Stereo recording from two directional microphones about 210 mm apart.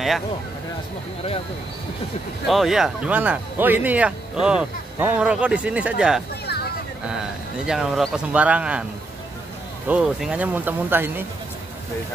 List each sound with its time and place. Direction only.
2.4 s speech: centre (ahead or behind)
6.4 s a sound: 50° left (ahead or behind)
7.1 s speech: 5° right (ahead or behind)
9.8 s speech: 5° right (ahead or behind)